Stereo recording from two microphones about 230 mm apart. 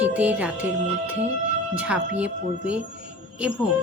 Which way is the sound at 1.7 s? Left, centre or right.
Centre.